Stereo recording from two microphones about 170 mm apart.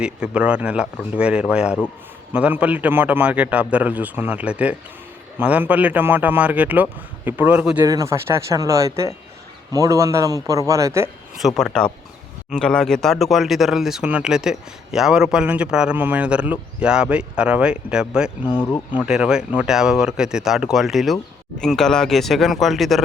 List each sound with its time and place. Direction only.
0.0 s a man's voice: 5° right (ahead or behind)
7.8 s a man's voice: 20° right (ahead or behind)
11.4 s speech: 5° left (ahead or behind)